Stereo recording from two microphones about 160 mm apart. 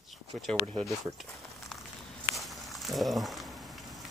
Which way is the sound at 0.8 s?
Centre (ahead or behind).